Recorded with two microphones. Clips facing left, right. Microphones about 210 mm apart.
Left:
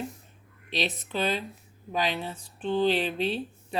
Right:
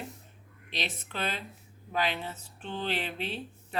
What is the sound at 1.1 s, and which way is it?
Speech, 15° left (ahead or behind).